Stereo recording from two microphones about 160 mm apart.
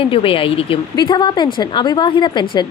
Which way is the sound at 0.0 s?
35° left (ahead or behind).